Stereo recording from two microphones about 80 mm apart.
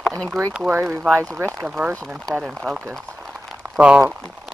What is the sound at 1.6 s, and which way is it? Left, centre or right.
Speech, centre.